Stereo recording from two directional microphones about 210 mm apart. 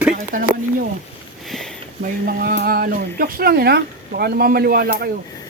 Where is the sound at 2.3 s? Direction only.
45° right (ahead or behind).